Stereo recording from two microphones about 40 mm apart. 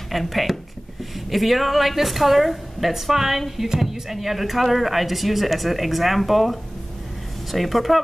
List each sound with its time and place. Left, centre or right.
0.1 s speech: centre